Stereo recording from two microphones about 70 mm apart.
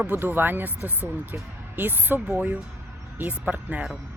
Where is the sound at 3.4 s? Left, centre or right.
Right.